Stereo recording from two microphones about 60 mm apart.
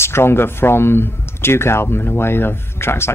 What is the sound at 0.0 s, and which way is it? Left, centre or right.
Speech, left.